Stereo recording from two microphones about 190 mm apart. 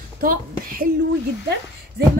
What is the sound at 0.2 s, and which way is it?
Speech, 50° right (ahead or behind).